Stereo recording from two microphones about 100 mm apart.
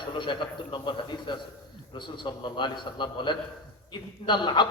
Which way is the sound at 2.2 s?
50° left (ahead or behind).